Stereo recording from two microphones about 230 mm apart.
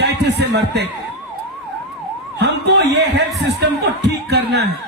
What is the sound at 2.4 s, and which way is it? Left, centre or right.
Speech, right.